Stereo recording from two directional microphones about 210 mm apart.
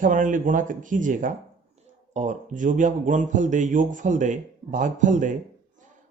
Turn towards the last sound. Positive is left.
turn(degrees=-35)  # may be behind; listen again after turning